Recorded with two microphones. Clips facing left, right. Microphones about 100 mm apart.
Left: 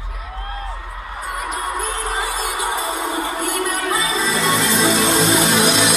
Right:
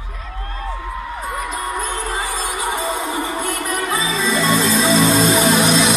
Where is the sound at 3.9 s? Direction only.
30° right (ahead or behind).